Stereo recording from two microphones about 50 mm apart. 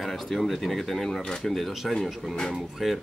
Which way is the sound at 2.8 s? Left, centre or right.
Centre.